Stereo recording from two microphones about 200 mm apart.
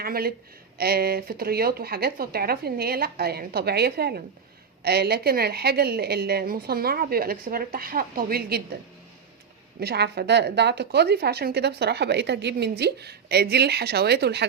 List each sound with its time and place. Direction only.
0.0 s a woman's voice: 50° right (ahead or behind)
9.8 s a woman's voice: 55° right (ahead or behind)